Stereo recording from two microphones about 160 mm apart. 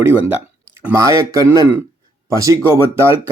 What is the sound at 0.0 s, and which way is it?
Speech, 10° right (ahead or behind).